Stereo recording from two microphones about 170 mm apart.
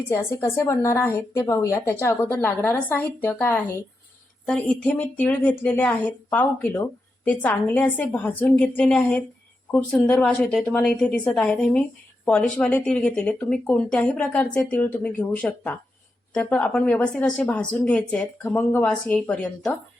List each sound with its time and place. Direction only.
0.1 s a woman's voice: 15° left (ahead or behind)